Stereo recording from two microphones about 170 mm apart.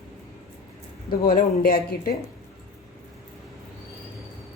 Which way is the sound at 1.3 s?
60° left (ahead or behind).